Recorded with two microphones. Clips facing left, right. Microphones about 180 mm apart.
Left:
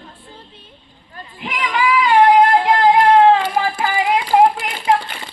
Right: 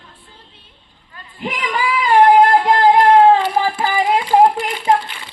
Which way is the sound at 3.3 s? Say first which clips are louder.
Right 1 dB; 35° right (ahead or behind).